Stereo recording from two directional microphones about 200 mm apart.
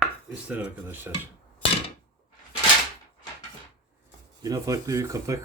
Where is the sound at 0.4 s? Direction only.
5° right (ahead or behind).